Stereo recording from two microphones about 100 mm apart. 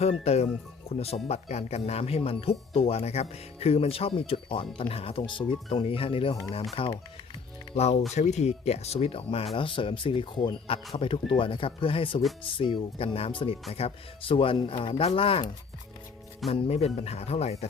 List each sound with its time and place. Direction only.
0.0 s speech: 90° left; by 6.9 s 65° left (ahead or behind)
8.4 s speech: 90° left; by 9.5 s 70° left (ahead or behind)
9.6 s speech: 60° left (ahead or behind)
13.1 s speech: 70° left (ahead or behind)
16.5 s speech: 90° left